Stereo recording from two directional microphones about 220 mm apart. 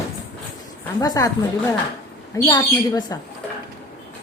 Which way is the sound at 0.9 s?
15° left (ahead or behind).